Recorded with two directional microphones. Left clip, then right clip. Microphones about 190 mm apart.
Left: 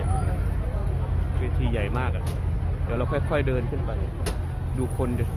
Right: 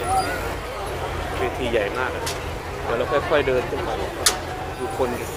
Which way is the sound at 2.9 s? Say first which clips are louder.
Right 6 dB; 20° left (ahead or behind).